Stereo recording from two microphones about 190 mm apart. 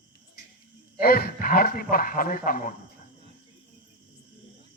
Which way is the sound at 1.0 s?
50° left (ahead or behind).